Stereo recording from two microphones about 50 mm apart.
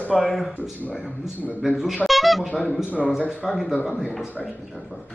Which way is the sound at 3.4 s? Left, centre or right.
Centre.